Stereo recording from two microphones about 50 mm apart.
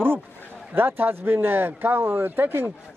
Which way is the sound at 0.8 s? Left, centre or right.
Right.